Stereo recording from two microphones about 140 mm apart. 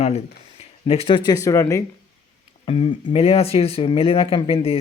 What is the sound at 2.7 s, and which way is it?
Speech, 40° left (ahead or behind).